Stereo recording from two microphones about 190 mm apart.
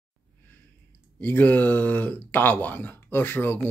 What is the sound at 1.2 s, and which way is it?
Speech, 10° left (ahead or behind).